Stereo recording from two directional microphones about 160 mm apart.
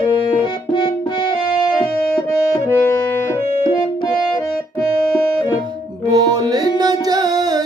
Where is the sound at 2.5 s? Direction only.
15° left (ahead or behind).